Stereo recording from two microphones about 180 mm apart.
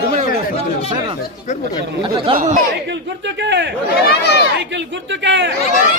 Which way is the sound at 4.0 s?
65° left (ahead or behind).